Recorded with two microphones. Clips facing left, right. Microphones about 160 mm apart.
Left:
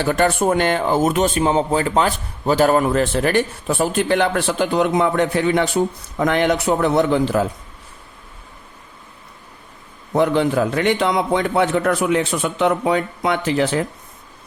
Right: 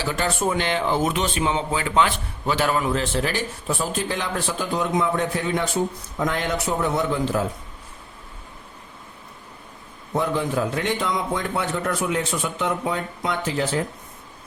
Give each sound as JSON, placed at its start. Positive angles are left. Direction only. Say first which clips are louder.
{"t": 0.0, "sound": "speech", "louder": "left 7 dB", "side_deg": 55}
{"t": 10.2, "sound": "a man's voice", "louder": "left 6 dB", "side_deg": 75}